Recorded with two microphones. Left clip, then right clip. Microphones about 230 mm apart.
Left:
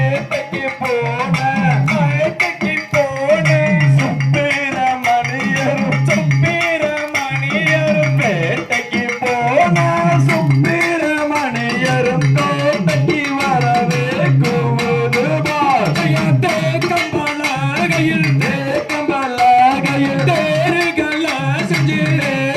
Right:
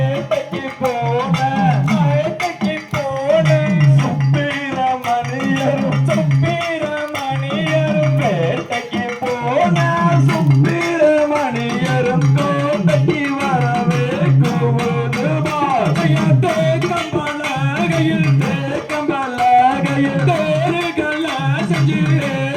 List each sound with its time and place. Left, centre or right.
3.2 s music: left
4.8 s music: left
7.7 s music: left
9.6 s music: left
12.6 s music: left
15.6 s music: left
19.4 s music: left